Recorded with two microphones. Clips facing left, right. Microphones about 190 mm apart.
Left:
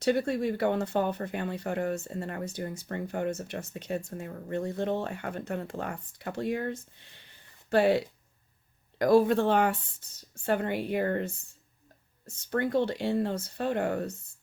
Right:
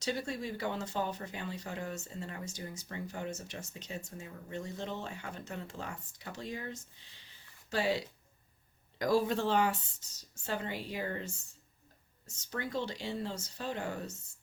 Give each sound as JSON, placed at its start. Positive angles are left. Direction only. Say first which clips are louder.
{"t": 0.0, "sound": "speech", "louder": "left 10 dB", "side_deg": 55}